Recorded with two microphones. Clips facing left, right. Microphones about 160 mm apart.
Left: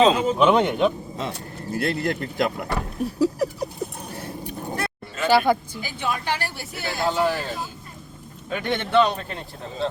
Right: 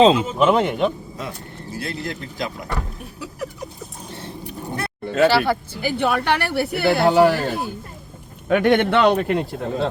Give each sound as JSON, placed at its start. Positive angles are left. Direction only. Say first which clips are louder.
{"t": 0.0, "sound": "speech", "louder": "right 3 dB", "side_deg": -25}
{"t": 0.3, "sound": "speech", "louder": "right 1 dB", "side_deg": -5}
{"t": 1.7, "sound": "speech", "louder": "left 5 dB", "side_deg": 60}
{"t": 3.2, "sound": "a sound", "louder": "left 9 dB", "side_deg": 35}
{"t": 4.1, "sound": "vehicle", "louder": "left 1 dB", "side_deg": -25}
{"t": 5.0, "sound": "a sound", "louder": "right 15 dB", "side_deg": -65}
{"t": 5.3, "sound": "speech", "louder": "left 1 dB", "side_deg": 15}
{"t": 5.8, "sound": "speech", "louder": "right 7 dB", "side_deg": -65}